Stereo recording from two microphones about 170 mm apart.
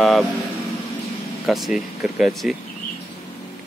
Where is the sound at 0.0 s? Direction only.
Centre (ahead or behind).